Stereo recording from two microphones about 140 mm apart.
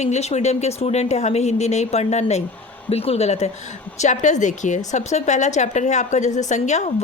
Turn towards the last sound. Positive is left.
turn(degrees=55)  # may be behind; listen again after turning